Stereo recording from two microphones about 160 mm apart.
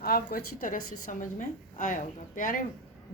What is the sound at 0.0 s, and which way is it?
A woman's voice, 65° left (ahead or behind).